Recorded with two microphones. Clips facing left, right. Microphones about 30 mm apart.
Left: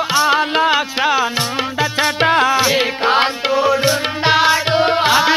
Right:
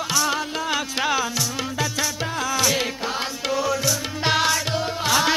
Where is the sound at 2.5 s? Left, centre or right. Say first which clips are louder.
Left 7 dB; left.